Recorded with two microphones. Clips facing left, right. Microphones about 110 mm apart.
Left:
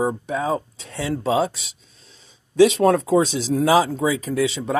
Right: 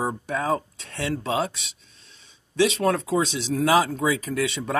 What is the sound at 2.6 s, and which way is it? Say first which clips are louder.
Speech: left 7 dB; 40° left (ahead or behind).